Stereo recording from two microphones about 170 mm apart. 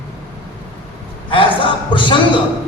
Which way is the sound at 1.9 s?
30° left (ahead or behind).